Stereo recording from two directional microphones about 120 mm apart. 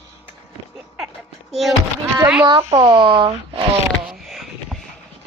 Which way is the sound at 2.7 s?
45° right (ahead or behind).